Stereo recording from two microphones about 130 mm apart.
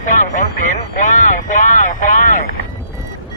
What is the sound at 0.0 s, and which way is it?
Speech, 80° left.